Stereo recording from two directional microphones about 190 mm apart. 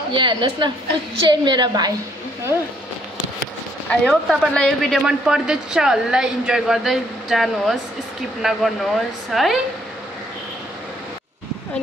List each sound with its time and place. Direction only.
0.1 s a woman's voice: 25° right (ahead or behind)
3.9 s a woman's voice: 5° left (ahead or behind)